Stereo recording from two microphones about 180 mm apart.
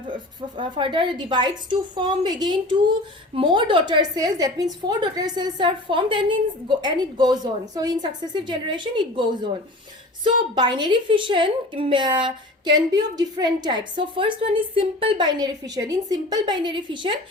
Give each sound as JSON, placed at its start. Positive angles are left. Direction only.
{"t": 0.1, "sound": "speech", "side_deg": -25}
{"t": 10.2, "sound": "speech", "side_deg": -25}